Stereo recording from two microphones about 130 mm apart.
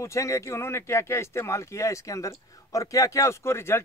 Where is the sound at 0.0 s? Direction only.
25° left (ahead or behind).